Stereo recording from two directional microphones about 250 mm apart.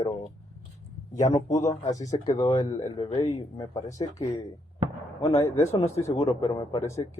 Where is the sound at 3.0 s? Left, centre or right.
Left.